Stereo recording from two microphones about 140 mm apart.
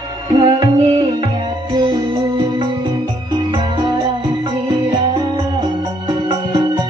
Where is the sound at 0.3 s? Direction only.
35° right (ahead or behind).